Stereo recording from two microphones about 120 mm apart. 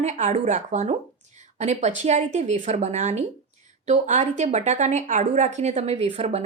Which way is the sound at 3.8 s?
85° right.